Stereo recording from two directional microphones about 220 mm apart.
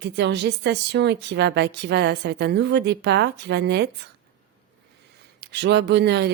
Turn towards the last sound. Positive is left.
turn(degrees=-50)  # may be behind; listen again after turning